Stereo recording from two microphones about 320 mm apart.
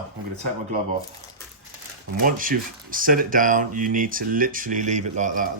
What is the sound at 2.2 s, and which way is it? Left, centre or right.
Speech, right.